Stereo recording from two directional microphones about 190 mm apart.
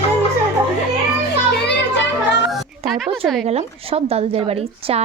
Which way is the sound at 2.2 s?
65° left (ahead or behind).